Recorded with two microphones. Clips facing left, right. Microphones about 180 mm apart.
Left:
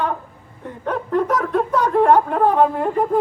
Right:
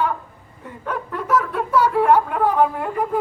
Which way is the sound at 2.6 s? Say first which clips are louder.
Left 3 dB; 35° left (ahead or behind).